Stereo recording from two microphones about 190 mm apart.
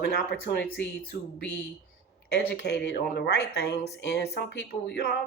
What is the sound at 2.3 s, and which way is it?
Speech, 60° left (ahead or behind).